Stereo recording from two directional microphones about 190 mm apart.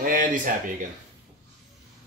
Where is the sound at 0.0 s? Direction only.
45° right (ahead or behind).